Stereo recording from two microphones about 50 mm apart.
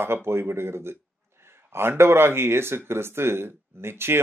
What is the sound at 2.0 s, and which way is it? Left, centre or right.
Speech, right.